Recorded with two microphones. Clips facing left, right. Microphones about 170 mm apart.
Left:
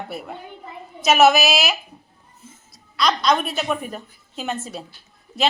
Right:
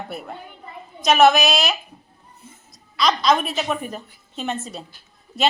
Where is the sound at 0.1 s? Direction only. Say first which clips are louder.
Left 1 dB; centre (ahead or behind).